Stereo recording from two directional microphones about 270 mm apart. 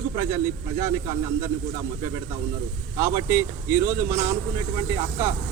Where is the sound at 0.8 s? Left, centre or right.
Centre.